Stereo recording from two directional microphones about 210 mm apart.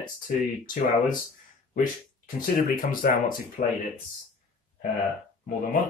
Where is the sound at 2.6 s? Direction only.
40° left (ahead or behind).